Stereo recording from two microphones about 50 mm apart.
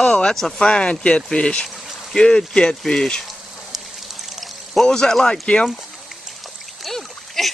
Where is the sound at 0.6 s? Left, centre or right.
Centre.